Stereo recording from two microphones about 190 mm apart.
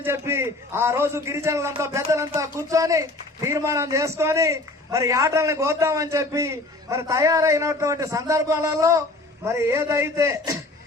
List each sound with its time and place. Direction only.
0.0 s a man's voice: 15° right (ahead or behind)